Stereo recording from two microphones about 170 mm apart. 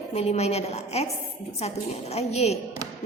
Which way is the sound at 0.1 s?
40° left (ahead or behind).